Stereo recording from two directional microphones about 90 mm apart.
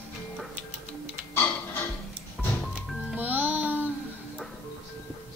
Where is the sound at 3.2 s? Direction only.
20° right (ahead or behind).